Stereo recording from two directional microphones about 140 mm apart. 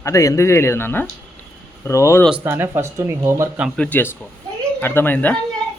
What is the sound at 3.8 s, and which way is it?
Speech, 15° left (ahead or behind).